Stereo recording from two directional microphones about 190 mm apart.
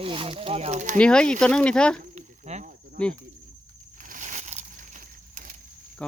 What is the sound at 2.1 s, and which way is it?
Cricket, 35° right (ahead or behind).